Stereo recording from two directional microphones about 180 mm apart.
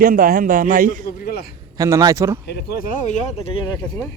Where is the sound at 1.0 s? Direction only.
55° left (ahead or behind).